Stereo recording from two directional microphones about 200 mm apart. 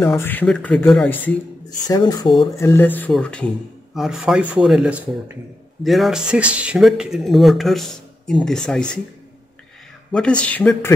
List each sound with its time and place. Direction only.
0.0 s speech: 10° left (ahead or behind)
1.9 s speech: 20° left (ahead or behind); by 9.0 s 5° left (ahead or behind)
10.1 s speech: 5° left (ahead or behind)